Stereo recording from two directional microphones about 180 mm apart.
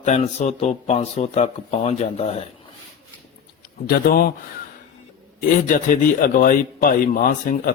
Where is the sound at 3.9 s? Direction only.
60° left (ahead or behind).